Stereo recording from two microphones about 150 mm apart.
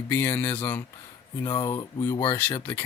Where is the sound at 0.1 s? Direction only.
15° left (ahead or behind).